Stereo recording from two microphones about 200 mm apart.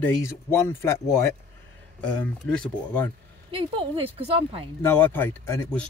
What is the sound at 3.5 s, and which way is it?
Speech, 25° right (ahead or behind).